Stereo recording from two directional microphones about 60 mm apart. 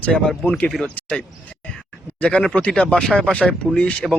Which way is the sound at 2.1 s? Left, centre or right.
Centre.